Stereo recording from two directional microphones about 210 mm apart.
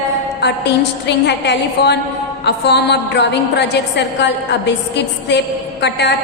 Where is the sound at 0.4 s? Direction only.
55° left (ahead or behind).